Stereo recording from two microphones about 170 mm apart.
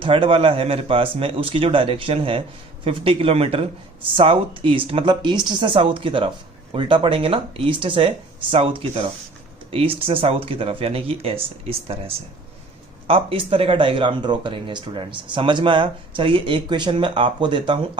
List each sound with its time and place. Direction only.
0.0 s a man's voice: 30° right (ahead or behind)